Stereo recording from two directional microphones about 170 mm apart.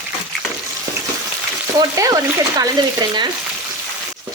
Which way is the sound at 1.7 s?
20° right (ahead or behind).